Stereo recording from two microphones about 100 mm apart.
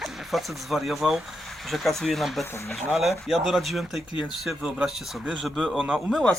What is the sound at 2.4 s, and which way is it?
Speech, 30° left (ahead or behind).